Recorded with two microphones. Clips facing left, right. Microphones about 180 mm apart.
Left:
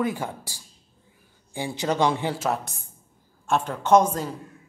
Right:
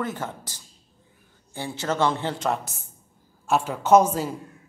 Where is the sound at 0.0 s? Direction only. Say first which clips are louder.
Left 3 dB; 10° left (ahead or behind).